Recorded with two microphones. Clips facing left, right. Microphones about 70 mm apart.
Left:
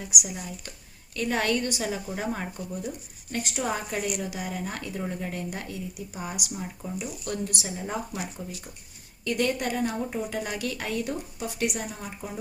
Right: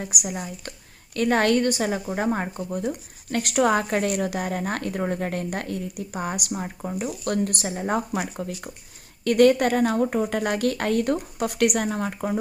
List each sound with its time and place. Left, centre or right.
0.0 s a woman's voice: right
3.3 s a woman's voice: right